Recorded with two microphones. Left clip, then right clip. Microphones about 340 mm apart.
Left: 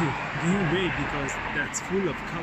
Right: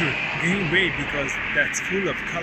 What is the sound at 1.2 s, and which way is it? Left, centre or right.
Speech, left.